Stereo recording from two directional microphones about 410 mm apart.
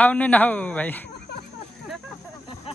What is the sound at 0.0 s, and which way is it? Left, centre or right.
Speech, centre.